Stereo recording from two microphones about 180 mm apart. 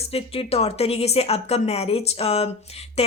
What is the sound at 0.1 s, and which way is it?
Speech, 35° left (ahead or behind).